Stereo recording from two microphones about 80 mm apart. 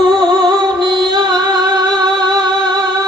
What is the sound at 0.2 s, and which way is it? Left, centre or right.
Music, right.